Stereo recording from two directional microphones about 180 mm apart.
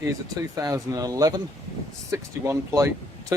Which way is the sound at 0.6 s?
20° right (ahead or behind).